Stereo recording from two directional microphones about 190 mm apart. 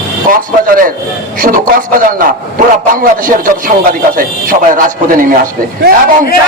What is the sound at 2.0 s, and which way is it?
A man's voice, 45° right (ahead or behind).